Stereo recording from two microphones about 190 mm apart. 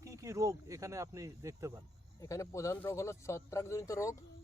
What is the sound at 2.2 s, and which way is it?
Speech, 15° left (ahead or behind).